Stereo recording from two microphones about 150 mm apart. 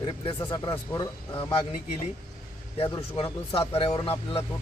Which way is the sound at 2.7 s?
35° left (ahead or behind).